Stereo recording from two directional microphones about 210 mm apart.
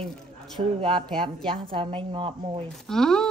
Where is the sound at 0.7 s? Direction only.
20° right (ahead or behind).